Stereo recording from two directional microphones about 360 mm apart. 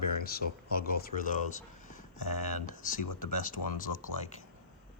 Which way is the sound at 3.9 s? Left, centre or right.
Left.